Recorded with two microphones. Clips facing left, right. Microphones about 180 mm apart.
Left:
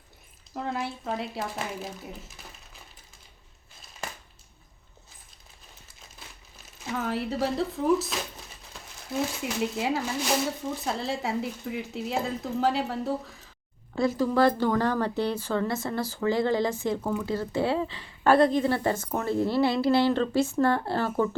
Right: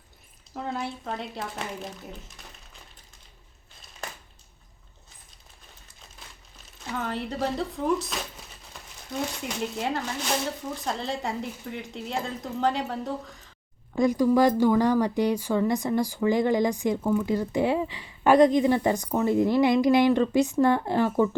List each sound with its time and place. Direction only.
0.5 s speech: centre (ahead or behind)
6.8 s speech: 5° left (ahead or behind)
13.9 s speech: 15° right (ahead or behind)